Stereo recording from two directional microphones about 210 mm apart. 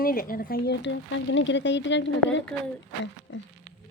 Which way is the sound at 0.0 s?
45° left (ahead or behind).